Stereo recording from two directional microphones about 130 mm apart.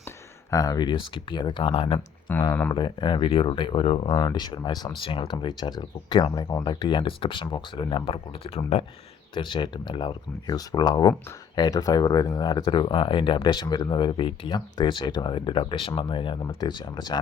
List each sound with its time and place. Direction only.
0.5 s speech: 30° left (ahead or behind); by 2.0 s 45° left (ahead or behind)
2.3 s speech: 15° left (ahead or behind)
2.7 s speech: 35° left (ahead or behind)
9.3 s speech: 40° left (ahead or behind)